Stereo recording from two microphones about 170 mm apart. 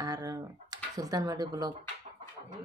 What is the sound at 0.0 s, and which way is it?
Computer keyboard, 20° right (ahead or behind).